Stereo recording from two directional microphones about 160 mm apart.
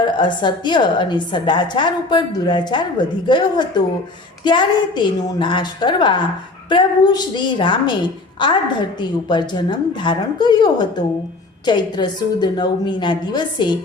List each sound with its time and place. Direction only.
0.0 s a woman's voice: 30° left (ahead or behind)